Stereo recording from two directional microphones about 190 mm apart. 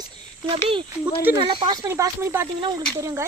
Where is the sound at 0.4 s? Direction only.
30° right (ahead or behind).